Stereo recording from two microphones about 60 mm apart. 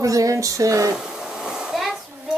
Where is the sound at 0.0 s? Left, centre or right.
Right.